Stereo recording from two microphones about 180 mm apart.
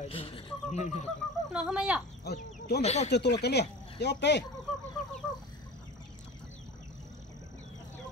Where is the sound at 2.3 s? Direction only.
60° left (ahead or behind).